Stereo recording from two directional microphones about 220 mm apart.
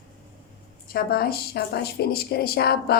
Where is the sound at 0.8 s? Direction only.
45° left (ahead or behind).